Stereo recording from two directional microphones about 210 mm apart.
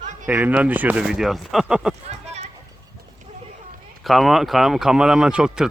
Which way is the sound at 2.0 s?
30° right (ahead or behind).